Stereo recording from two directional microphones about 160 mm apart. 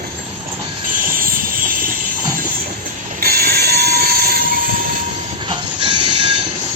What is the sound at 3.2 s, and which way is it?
Train, 75° right (ahead or behind).